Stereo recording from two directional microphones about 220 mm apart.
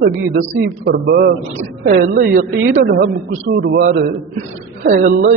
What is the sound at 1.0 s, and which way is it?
A woman's voice, 45° right (ahead or behind).